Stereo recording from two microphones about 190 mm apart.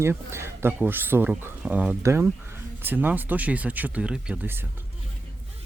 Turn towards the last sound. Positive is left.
turn(degrees=-10)  # may be behind; listen again after turning